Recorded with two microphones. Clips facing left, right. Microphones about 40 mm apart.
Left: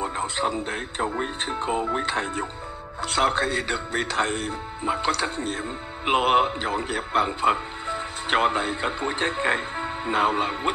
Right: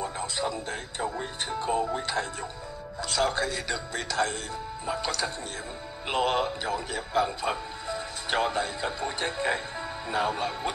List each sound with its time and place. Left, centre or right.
0.0 s a man's voice: left